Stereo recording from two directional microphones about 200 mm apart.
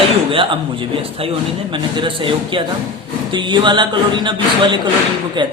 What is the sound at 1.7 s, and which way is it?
A man's voice, 25° right (ahead or behind).